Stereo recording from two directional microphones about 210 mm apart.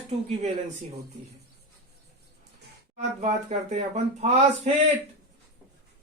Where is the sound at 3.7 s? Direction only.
35° right (ahead or behind).